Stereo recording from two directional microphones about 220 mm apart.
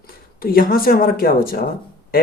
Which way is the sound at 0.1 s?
40° left (ahead or behind).